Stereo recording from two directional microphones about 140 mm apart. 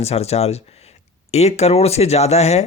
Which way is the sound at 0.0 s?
50° left (ahead or behind).